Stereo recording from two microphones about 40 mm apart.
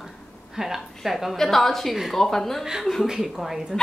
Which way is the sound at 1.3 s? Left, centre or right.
Centre.